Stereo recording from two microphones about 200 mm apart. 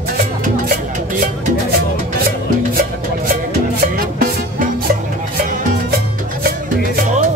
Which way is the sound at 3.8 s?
45° right (ahead or behind).